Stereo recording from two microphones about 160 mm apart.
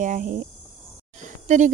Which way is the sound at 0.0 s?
50° right (ahead or behind).